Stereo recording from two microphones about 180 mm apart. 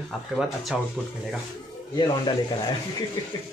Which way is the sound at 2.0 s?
25° left (ahead or behind).